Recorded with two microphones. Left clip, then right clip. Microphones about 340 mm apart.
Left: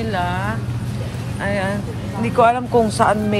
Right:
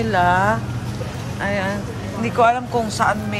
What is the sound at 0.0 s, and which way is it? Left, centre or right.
Speech, centre.